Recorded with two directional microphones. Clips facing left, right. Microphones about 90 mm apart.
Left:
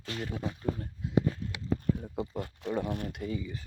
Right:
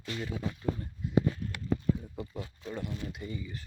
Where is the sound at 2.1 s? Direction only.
25° left (ahead or behind).